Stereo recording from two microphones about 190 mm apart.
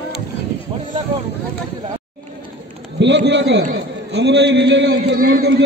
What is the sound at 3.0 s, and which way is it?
A man's voice, 70° right (ahead or behind).